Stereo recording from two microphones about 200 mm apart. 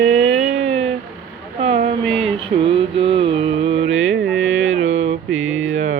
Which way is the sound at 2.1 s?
30° right (ahead or behind).